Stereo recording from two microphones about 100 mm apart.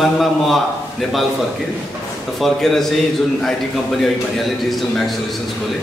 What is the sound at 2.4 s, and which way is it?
Speech, 5° left (ahead or behind).